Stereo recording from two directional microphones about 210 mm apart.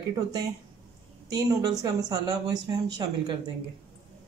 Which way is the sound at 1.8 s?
15° right (ahead or behind).